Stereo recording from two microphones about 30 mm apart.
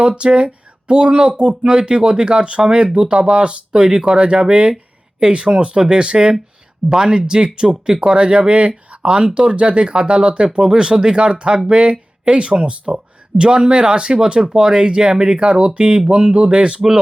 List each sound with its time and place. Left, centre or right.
0.2 s speech: right
10.6 s speech: right